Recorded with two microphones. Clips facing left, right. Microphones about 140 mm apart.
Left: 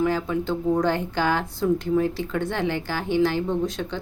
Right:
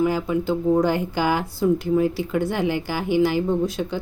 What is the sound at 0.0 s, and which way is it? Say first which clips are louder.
Speech: right 2 dB; 10° right (ahead or behind).